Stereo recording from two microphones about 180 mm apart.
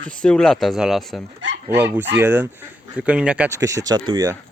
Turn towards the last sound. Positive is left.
turn(degrees=-20)  # may be behind; listen again after turning